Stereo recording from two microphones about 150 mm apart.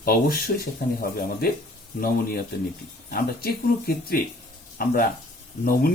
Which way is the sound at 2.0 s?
80° left.